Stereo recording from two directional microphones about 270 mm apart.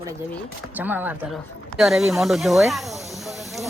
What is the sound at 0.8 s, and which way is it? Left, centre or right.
Speech, centre.